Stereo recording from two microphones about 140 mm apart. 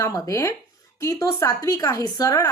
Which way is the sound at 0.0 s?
25° left (ahead or behind).